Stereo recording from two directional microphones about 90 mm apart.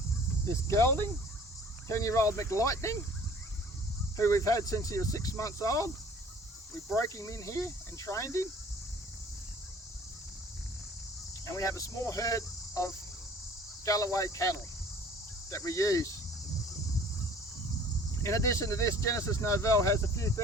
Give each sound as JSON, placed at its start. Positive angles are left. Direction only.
{"t": 0.4, "sound": "speech", "side_deg": 30}
{"t": 4.2, "sound": "speech", "side_deg": 30}
{"t": 6.9, "sound": "speech", "side_deg": 30}
{"t": 11.4, "sound": "cricket", "side_deg": 35}
{"t": 13.8, "sound": "speech", "side_deg": 40}
{"t": 18.2, "sound": "speech", "side_deg": 35}